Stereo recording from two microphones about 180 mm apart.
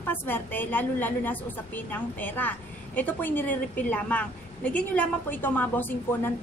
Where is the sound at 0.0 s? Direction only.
10° left (ahead or behind).